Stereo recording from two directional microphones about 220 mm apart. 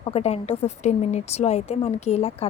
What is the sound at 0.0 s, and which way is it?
Speech, 25° left (ahead or behind).